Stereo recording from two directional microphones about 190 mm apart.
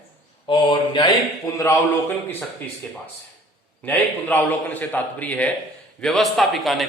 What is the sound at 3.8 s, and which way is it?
A man's voice, 10° left (ahead or behind).